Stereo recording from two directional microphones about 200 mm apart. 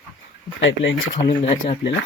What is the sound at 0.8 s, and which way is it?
Speech, 75° left (ahead or behind).